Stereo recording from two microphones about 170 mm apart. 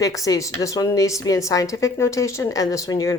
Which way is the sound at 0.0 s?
20° left (ahead or behind).